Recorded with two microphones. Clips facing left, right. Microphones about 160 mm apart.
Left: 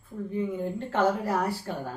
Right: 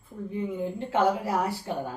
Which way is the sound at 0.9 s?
10° right (ahead or behind).